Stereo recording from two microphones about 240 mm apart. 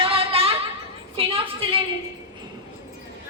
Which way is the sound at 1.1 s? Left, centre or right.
Right.